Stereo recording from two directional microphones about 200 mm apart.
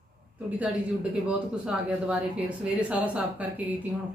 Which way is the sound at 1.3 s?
5° right (ahead or behind).